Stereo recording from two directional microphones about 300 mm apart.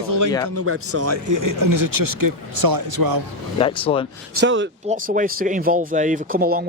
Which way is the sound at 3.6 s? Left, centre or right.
Centre.